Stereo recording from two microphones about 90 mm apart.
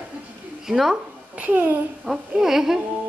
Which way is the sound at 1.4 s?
20° right (ahead or behind).